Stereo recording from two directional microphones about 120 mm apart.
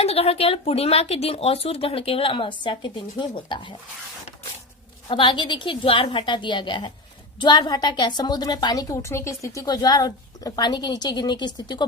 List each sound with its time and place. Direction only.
0.0 s speech: 55° left (ahead or behind); by 3.8 s 40° left (ahead or behind)
5.0 s a woman's voice: 45° left (ahead or behind)